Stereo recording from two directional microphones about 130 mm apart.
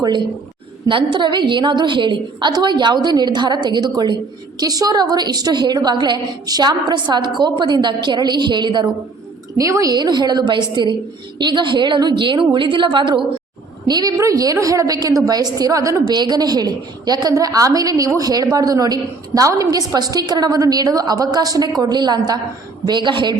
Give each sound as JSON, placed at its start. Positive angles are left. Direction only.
{"t": 0.0, "sound": "a woman's voice", "side_deg": -35}
{"t": 9.6, "sound": "a woman's voice", "side_deg": -25}